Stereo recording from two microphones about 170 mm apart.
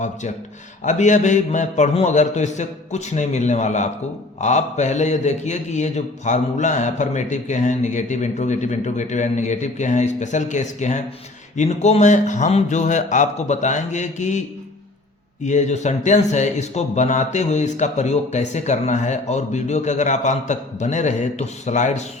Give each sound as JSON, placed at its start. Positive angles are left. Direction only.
{"t": 0.9, "sound": "a man's voice", "side_deg": 45}
{"t": 15.4, "sound": "a man's voice", "side_deg": 45}